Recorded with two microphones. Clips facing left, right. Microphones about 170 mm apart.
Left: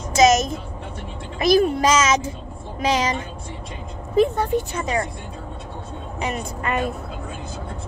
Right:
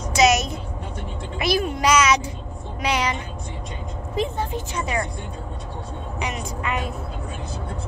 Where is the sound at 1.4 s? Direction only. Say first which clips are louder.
Left 5 dB; 45° left (ahead or behind).